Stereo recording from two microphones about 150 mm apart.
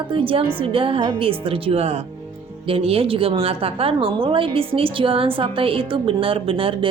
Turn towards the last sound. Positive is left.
turn(degrees=-35)  # may be behind; listen again after turning